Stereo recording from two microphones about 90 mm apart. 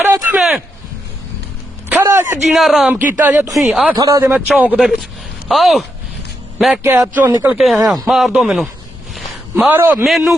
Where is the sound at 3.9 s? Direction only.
45° right (ahead or behind).